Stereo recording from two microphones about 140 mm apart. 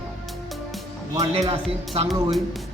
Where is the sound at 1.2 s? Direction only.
45° right (ahead or behind).